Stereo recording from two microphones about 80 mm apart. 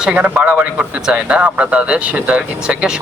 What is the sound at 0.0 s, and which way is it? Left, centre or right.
A man's voice, centre.